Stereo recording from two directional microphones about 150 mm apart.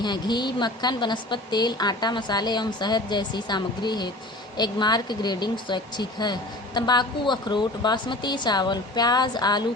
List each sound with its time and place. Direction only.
0.0 s speech: 30° left (ahead or behind)